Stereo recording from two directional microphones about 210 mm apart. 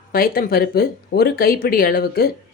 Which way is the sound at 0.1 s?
45° left (ahead or behind).